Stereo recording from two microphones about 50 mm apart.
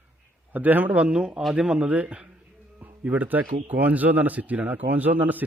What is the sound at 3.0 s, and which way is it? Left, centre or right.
Speech, right.